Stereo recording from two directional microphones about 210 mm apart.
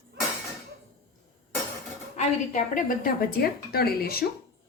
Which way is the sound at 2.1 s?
35° left (ahead or behind).